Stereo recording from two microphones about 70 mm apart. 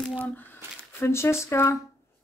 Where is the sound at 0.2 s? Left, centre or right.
Left.